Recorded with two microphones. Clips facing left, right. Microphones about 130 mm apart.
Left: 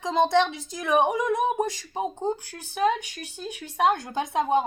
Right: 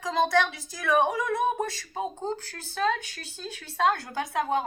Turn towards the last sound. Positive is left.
turn(degrees=20)  # may be behind; listen again after turning